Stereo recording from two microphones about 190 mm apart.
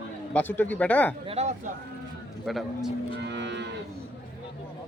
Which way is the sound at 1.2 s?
35° right (ahead or behind).